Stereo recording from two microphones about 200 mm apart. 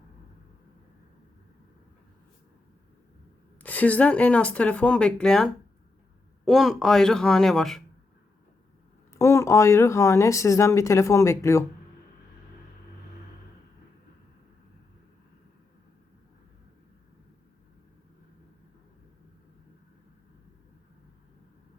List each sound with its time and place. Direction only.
3.6 s speech: 10° left (ahead or behind)
9.1 s speech: 15° left (ahead or behind)